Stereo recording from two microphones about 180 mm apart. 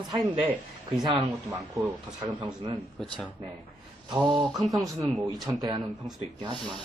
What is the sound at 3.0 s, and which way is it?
Speech, 5° left (ahead or behind).